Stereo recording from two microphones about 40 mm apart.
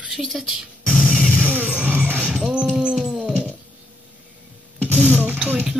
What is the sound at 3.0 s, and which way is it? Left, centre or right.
Dog, centre.